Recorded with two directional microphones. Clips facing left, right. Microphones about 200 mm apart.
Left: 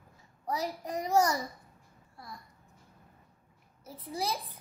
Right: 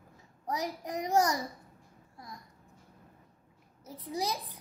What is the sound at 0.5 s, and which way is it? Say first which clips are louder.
Speech: left 1 dB; 15° right (ahead or behind).